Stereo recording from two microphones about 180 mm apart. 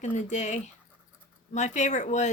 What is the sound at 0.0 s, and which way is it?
Speech, 40° left (ahead or behind).